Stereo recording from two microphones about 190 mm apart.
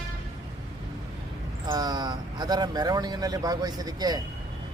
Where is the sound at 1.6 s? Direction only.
20° right (ahead or behind).